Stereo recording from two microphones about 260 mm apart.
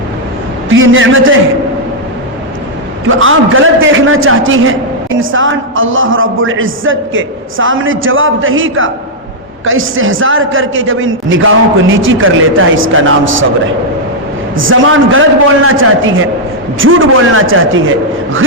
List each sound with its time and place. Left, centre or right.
0.7 s a man's voice: right
3.2 s a man's voice: right
14.5 s a man's voice: right